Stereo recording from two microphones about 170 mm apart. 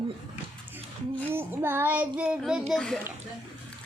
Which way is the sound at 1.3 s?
15° right (ahead or behind).